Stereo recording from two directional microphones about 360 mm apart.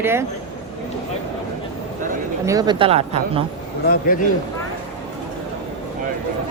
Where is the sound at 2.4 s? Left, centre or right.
Centre.